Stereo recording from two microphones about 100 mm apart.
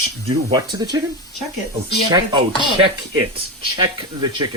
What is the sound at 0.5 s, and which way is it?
Speech, 45° right (ahead or behind).